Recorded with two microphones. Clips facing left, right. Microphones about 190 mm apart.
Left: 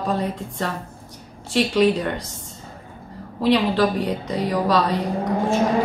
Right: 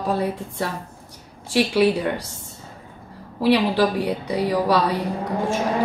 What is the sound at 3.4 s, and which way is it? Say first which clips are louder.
A woman's voice: even; 10° right (ahead or behind).